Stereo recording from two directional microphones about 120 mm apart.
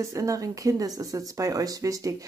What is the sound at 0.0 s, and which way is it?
Speech, 25° right (ahead or behind).